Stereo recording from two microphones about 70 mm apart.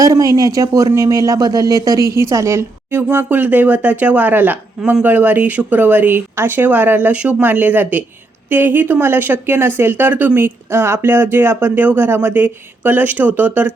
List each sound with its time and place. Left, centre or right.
0.0 s speech: right